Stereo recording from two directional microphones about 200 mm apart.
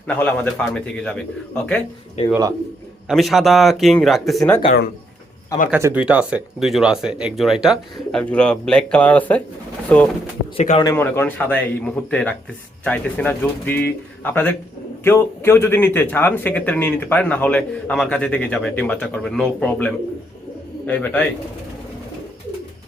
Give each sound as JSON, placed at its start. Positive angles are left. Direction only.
{"t": 0.1, "sound": "speech", "side_deg": 5}
{"t": 2.2, "sound": "speech", "side_deg": 30}
{"t": 3.1, "sound": "speech", "side_deg": 0}
{"t": 5.7, "sound": "speech", "side_deg": -10}
{"t": 10.6, "sound": "speech", "side_deg": 35}
{"t": 10.8, "sound": "speech", "side_deg": 10}